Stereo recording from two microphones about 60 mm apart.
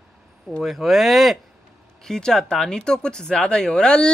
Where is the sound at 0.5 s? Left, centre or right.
Centre.